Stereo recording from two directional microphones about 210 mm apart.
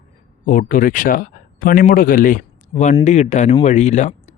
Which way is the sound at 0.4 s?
40° left (ahead or behind).